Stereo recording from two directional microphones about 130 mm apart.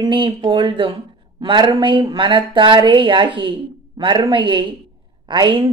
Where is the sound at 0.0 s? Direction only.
40° right (ahead or behind).